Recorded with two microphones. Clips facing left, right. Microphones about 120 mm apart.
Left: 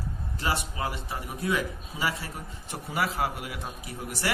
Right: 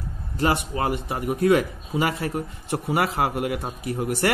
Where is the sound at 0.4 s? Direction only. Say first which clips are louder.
Right 8 dB; 55° right (ahead or behind).